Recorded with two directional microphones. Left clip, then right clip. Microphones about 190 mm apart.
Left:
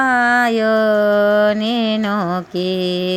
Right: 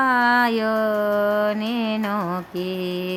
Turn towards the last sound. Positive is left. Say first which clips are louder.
# left 8 dB
turn(degrees=25)  # may be behind; listen again after turning